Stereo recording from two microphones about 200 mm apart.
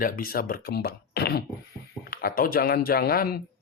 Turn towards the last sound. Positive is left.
turn(degrees=50)  # may be behind; listen again after turning